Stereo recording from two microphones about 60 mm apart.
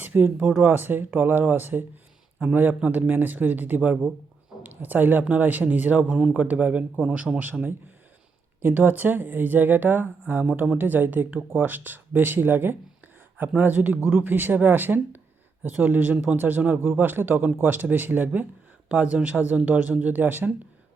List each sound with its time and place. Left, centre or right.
0.0 s a man's voice: right
6.1 s speech: centre
6.3 s a woman's voice: right
7.3 s speech: centre
8.6 s a woman's voice: right